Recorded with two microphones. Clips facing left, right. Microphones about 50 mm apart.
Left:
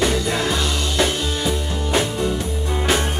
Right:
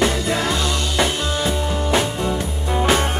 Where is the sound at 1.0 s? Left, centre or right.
Centre.